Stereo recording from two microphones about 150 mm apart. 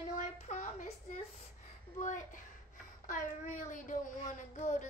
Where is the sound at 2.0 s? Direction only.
55° left (ahead or behind).